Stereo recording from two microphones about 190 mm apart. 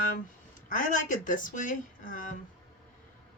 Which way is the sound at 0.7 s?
45° left (ahead or behind).